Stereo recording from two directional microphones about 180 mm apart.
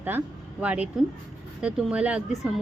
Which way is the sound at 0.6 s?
5° right (ahead or behind).